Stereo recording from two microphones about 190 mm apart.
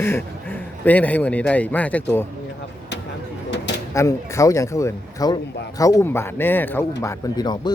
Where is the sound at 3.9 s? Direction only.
15° left (ahead or behind).